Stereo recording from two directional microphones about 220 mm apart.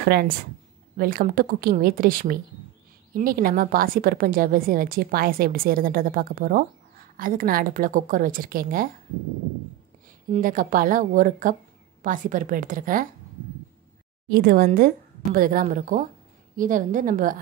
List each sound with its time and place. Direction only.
0.9 s a woman's voice: 40° right (ahead or behind)
10.3 s a woman's voice: 40° right (ahead or behind)
14.3 s a woman's voice: 45° right (ahead or behind)